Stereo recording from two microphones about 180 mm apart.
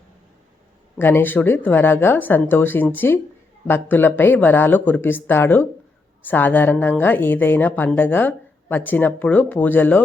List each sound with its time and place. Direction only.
0.9 s a woman's voice: 10° left (ahead or behind)